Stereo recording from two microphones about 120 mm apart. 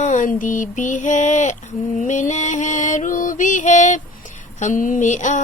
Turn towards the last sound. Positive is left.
turn(degrees=90)